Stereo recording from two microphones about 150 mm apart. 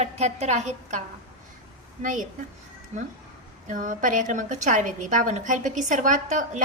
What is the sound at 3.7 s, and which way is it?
A woman's voice, 60° right (ahead or behind).